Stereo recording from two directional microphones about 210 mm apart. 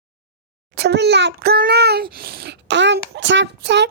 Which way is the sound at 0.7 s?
50° right (ahead or behind).